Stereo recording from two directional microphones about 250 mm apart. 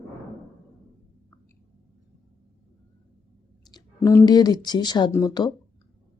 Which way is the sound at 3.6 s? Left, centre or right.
Centre.